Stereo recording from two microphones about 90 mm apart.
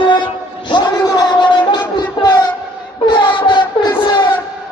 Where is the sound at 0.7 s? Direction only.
55° left (ahead or behind).